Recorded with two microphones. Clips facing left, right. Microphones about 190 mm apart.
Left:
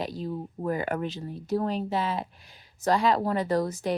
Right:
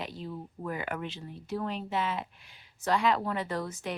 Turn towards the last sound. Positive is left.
turn(degrees=35)  # may be behind; listen again after turning